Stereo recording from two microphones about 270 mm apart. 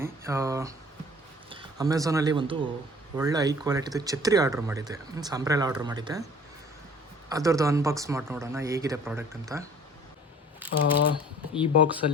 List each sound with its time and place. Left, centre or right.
0.0 s speech: centre
7.3 s speech: centre
10.7 s speech: left
11.0 s speech: centre